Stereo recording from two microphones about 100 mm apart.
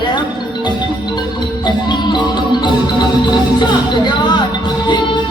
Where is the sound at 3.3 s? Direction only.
45° left (ahead or behind).